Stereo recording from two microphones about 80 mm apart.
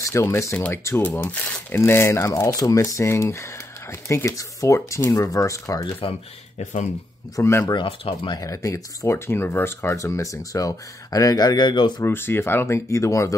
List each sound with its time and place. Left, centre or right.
0.0 s speech: left
1.0 s speech: left
1.8 s speech: left
7.3 s speech: left
7.6 s speech: left
8.4 s speech: left
12.0 s speech: left